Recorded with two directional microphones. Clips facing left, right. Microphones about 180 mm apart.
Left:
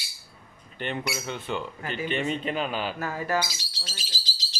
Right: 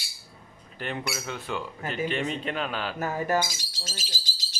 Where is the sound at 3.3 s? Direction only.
45° right (ahead or behind).